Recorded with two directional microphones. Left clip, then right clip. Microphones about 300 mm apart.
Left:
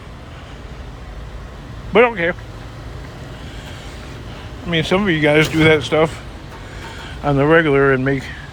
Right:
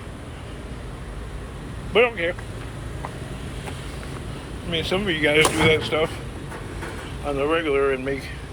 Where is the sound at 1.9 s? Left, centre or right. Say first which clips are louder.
Left 6 dB; left.